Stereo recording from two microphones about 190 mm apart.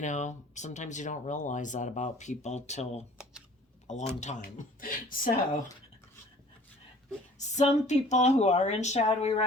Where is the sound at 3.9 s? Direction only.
35° left (ahead or behind).